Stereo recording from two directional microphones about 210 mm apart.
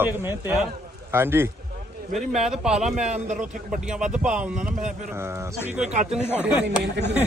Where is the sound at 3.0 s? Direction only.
35° right (ahead or behind).